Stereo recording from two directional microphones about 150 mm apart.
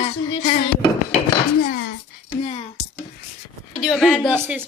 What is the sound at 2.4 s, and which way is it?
Speech, 45° left (ahead or behind).